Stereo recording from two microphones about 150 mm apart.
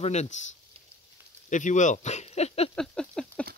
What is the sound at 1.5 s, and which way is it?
Speech, 55° left (ahead or behind).